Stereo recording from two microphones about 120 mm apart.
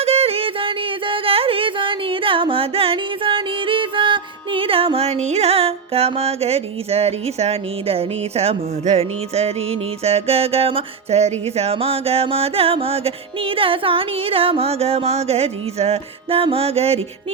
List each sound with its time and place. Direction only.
0.0 s music: 55° right (ahead or behind)